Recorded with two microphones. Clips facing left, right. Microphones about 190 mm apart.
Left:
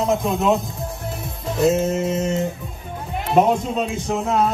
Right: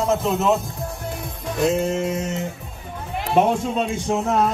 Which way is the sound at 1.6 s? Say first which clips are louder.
Left 2 dB; 5° left (ahead or behind).